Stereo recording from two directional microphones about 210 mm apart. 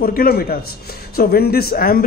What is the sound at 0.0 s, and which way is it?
Speech, 45° left (ahead or behind).